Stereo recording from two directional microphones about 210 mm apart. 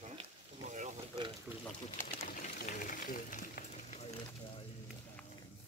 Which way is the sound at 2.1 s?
40° left (ahead or behind).